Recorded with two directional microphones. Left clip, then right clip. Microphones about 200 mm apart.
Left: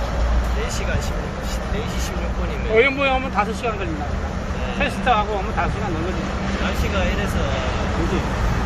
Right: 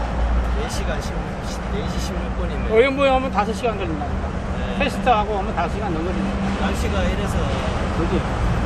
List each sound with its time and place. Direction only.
2.7 s speech: 15° right (ahead or behind)
4.8 s speech: 15° right (ahead or behind)